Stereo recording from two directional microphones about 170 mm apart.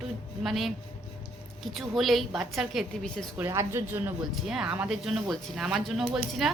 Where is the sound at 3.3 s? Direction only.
15° right (ahead or behind).